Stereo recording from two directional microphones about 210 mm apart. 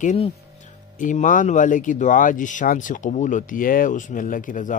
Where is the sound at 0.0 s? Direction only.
35° left (ahead or behind).